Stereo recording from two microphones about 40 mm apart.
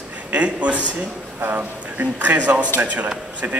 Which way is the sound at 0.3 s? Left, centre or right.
Right.